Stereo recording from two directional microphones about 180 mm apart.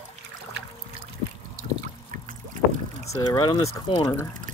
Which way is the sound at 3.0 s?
20° left (ahead or behind).